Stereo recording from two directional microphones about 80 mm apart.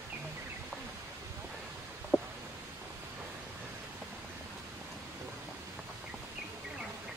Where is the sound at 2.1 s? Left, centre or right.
Right.